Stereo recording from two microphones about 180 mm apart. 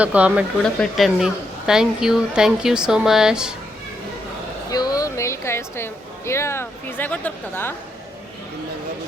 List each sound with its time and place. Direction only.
0.0 s a woman's voice: 5° right (ahead or behind)
4.7 s speech: 20° left (ahead or behind)